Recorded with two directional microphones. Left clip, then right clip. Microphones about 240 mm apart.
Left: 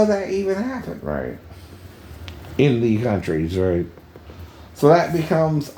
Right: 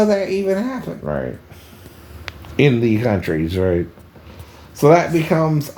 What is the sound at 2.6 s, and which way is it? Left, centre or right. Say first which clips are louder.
Speech: right 3 dB; centre.